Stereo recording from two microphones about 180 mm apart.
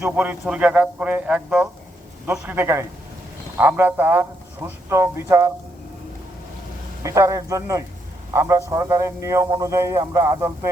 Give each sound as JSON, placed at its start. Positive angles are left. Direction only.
{"t": 0.0, "sound": "a man's voice", "side_deg": -5}
{"t": 7.0, "sound": "a man's voice", "side_deg": -15}